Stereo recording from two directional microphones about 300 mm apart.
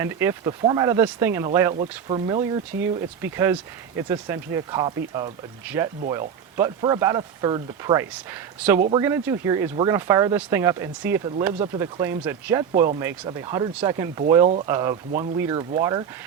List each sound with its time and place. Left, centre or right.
0.0 s speech: centre
15.1 s speech: right